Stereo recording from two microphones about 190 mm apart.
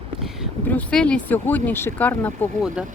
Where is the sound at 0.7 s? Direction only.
5° left (ahead or behind).